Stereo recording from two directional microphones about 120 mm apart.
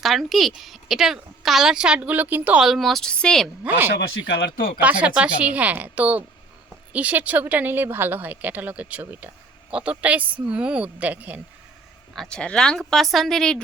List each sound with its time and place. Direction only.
0.0 s a woman's voice: centre (ahead or behind)
3.6 s speech: 15° right (ahead or behind)
12.1 s a woman's voice: 5° left (ahead or behind)